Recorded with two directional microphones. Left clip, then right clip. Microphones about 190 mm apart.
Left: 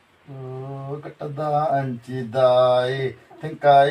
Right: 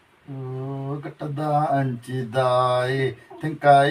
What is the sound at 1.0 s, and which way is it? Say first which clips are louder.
Speech: left 4 dB; centre (ahead or behind).